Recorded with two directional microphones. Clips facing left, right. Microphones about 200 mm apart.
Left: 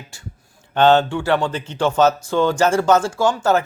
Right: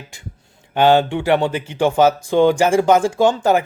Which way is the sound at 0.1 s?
15° right (ahead or behind).